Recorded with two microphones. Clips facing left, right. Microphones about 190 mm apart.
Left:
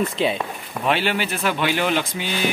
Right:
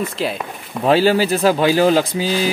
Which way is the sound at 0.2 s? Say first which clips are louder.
Left 1 dB; 5° right (ahead or behind).